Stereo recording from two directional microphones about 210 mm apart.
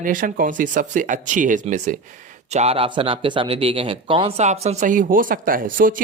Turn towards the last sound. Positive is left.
turn(degrees=-40)  # may be behind; listen again after turning